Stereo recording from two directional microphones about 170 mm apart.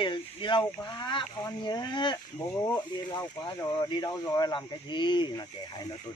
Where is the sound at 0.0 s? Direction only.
30° left (ahead or behind).